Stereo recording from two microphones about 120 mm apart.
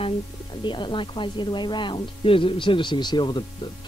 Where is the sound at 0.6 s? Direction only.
40° left (ahead or behind).